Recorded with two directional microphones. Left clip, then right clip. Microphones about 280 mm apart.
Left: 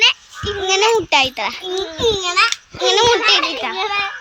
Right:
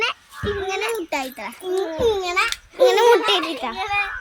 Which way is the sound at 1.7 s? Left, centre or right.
Centre.